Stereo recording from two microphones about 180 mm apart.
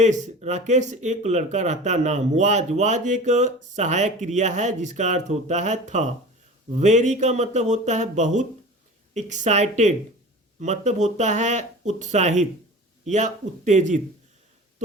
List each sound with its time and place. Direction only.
0.0 s speech: 40° right (ahead or behind)